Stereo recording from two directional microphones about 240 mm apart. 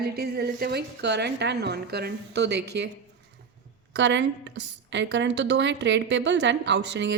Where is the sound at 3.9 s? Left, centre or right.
Right.